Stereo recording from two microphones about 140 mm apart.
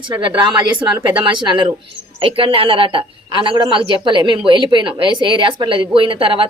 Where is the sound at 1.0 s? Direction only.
35° right (ahead or behind).